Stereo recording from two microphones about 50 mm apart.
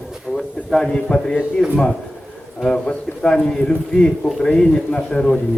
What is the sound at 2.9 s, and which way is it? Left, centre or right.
A man's voice, left.